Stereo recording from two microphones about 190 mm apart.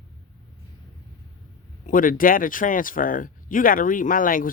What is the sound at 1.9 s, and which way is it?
Speech, 45° left (ahead or behind).